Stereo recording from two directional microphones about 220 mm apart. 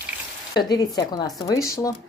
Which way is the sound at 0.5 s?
20° left (ahead or behind).